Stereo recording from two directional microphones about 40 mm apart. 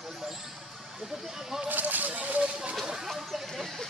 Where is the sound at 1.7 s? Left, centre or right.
Right.